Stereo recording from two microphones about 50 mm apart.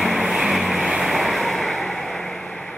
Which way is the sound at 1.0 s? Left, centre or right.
Centre.